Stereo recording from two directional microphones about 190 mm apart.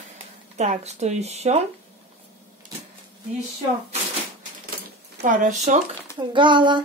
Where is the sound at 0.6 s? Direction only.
35° right (ahead or behind).